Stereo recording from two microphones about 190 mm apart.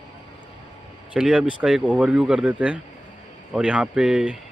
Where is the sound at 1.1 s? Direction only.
5° right (ahead or behind).